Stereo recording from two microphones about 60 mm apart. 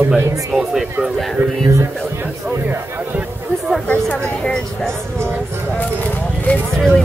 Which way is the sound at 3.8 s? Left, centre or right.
Left.